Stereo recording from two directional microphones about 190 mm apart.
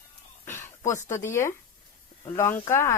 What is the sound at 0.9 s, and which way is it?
Speech, 15° left (ahead or behind).